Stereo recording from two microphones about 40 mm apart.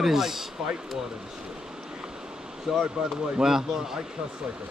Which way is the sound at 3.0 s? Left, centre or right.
Centre.